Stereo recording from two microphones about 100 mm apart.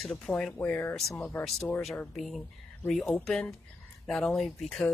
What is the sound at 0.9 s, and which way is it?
A woman's voice, 5° left (ahead or behind).